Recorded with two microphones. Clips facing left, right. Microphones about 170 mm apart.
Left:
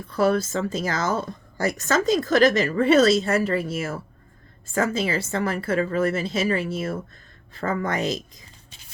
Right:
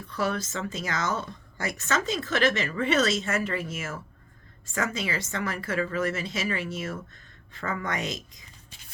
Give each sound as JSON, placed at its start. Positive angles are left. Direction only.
{"t": 0.0, "sound": "a woman's voice", "side_deg": 35}